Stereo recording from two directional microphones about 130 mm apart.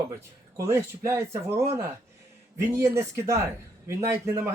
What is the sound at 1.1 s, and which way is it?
Speech, 20° right (ahead or behind).